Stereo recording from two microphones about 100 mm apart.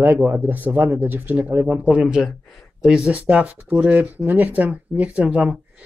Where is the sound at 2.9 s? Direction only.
15° right (ahead or behind).